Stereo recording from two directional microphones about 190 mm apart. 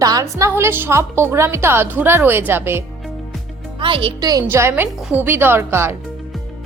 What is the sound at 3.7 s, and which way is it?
A woman's voice, 25° right (ahead or behind).